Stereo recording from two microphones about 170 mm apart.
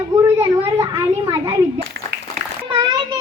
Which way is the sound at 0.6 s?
25° right (ahead or behind).